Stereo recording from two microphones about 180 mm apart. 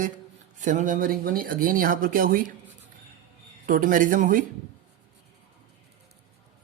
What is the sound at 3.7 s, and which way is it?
Speech, 45° right (ahead or behind).